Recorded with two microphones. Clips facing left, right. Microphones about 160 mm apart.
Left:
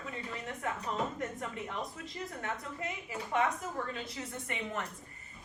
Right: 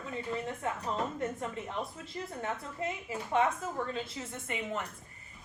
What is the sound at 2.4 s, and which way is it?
A woman's voice, 25° right (ahead or behind).